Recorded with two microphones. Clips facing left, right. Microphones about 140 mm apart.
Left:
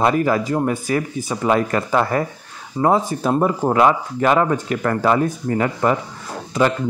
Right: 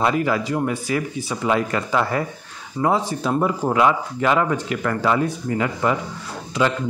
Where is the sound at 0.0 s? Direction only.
45° left (ahead or behind).